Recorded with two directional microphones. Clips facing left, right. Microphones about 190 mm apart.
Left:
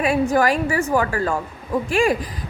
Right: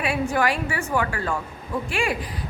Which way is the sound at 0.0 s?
40° left (ahead or behind).